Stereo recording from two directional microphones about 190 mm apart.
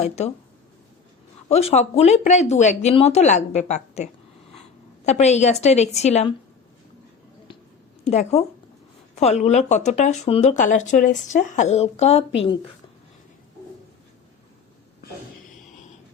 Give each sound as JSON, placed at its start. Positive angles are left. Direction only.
{"t": 1.5, "sound": "speech", "side_deg": 35}
{"t": 8.0, "sound": "speech", "side_deg": 35}
{"t": 12.3, "sound": "speech", "side_deg": 70}